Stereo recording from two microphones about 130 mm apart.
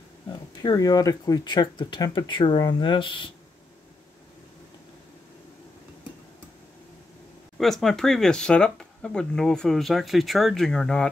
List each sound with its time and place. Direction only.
0.3 s speech: 30° left (ahead or behind)
7.5 s speech: centre (ahead or behind)